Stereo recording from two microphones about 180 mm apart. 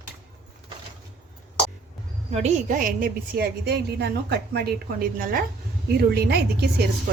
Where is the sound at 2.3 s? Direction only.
40° right (ahead or behind); by 6.7 s 65° right (ahead or behind).